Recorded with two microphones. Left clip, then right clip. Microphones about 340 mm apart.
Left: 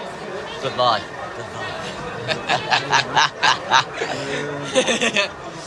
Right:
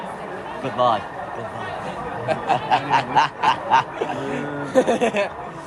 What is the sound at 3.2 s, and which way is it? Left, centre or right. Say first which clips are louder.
Speech: left 1 dB; centre.